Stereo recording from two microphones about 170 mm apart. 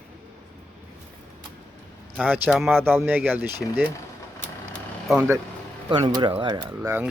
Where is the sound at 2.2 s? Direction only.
10° right (ahead or behind).